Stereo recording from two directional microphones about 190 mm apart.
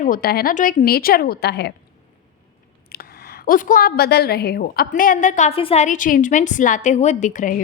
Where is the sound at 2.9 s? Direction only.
55° left (ahead or behind).